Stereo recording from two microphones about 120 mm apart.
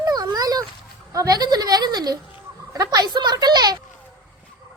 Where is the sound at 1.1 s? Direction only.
30° right (ahead or behind).